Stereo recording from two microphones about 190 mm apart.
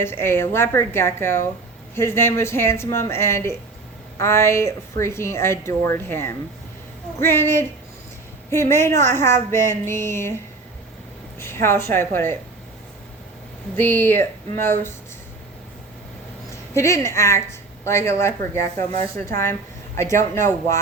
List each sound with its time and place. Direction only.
0.0 s speech: 10° left (ahead or behind)
11.3 s speech: 15° left (ahead or behind)
13.7 s speech: 10° left (ahead or behind)
16.7 s speech: 15° left (ahead or behind)